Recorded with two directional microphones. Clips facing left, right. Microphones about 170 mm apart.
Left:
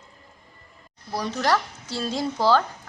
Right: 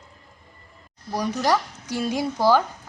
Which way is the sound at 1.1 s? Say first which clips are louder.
Right 1 dB; 10° right (ahead or behind).